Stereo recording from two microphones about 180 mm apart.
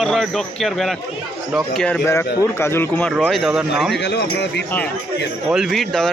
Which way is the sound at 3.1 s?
Centre (ahead or behind).